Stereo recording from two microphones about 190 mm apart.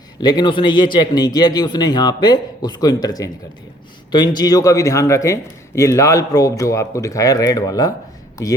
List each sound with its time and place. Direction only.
0.2 s speech: 20° left (ahead or behind)
4.4 s a man's voice: 20° left (ahead or behind)